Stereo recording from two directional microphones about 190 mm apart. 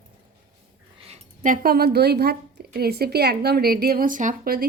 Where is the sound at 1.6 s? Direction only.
55° right (ahead or behind).